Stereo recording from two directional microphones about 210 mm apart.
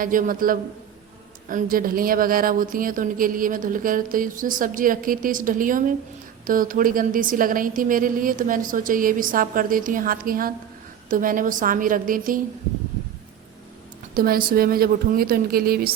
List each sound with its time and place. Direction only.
0.0 s a woman's voice: 40° right (ahead or behind)
14.1 s a woman's voice: 45° right (ahead or behind)